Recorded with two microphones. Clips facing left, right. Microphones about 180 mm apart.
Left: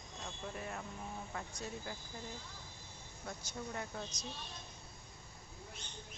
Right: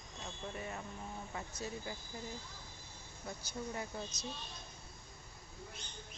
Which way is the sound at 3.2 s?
5° right (ahead or behind).